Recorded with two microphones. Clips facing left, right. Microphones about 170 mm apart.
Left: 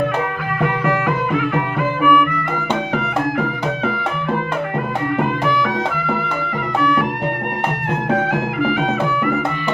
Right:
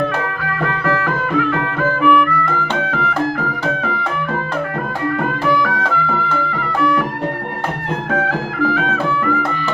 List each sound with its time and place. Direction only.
0.6 s music: 15° left (ahead or behind)
5.6 s music: 20° left (ahead or behind)
8.1 s music: 20° left (ahead or behind)